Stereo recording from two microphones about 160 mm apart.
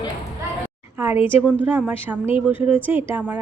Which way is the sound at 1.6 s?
10° right (ahead or behind).